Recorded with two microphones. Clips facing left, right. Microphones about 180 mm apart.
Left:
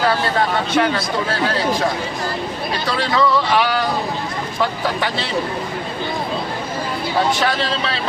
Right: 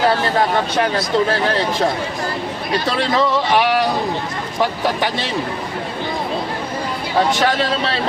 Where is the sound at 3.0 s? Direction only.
20° right (ahead or behind).